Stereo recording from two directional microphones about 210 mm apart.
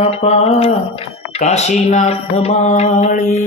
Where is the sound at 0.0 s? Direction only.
30° left (ahead or behind).